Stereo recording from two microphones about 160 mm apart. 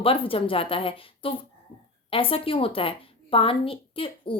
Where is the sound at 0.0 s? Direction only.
35° left (ahead or behind).